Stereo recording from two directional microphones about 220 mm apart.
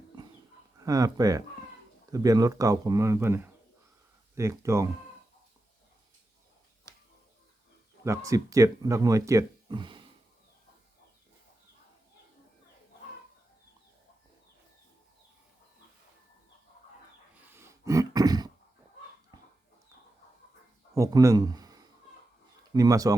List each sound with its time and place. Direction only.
0.8 s speech: 15° right (ahead or behind)
6.9 s a sound: 15° left (ahead or behind)
8.0 s speech: 15° right (ahead or behind)
17.5 s a sound: 10° right (ahead or behind)
20.9 s speech: 15° right (ahead or behind)
22.7 s speech: 15° right (ahead or behind)